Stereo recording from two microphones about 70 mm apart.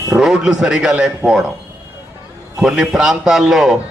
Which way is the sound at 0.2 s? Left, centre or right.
Centre.